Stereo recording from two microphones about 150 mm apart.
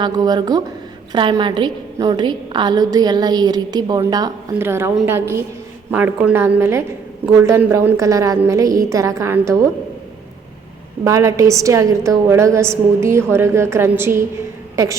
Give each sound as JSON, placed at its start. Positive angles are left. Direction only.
{"t": 0.0, "sound": "a woman's voice", "side_deg": -25}
{"t": 4.5, "sound": "a woman's voice", "side_deg": -15}
{"t": 11.0, "sound": "a woman's voice", "side_deg": -20}